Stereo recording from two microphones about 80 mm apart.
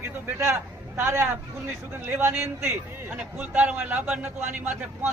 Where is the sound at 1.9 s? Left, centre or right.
Right.